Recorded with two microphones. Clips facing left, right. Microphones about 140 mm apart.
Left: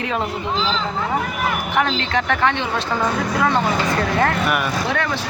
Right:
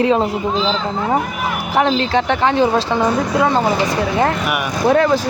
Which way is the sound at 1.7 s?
30° right (ahead or behind).